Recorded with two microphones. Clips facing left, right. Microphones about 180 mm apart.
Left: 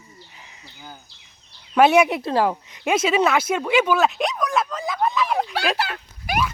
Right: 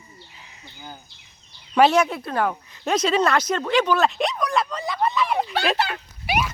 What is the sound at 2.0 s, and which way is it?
Speech, 20° left (ahead or behind).